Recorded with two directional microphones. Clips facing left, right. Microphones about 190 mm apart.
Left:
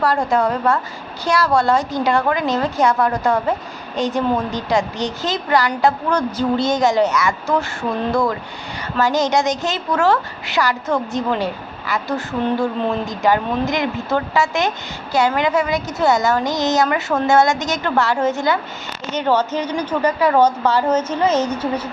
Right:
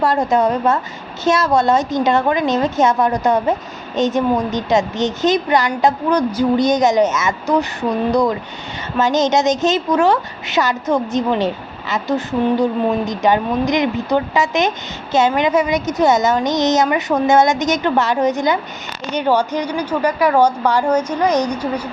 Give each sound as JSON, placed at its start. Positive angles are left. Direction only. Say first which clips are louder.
{"t": 0.0, "sound": "a woman's voice", "louder": "right 2 dB", "side_deg": -20}